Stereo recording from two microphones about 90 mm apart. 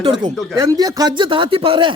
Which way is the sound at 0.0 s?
50° right (ahead or behind).